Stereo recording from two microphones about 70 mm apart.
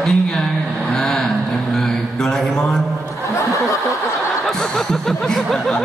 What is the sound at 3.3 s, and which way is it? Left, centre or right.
Snicker, left.